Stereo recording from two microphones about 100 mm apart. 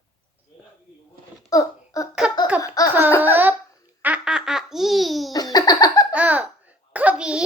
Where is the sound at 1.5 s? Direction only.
35° left (ahead or behind).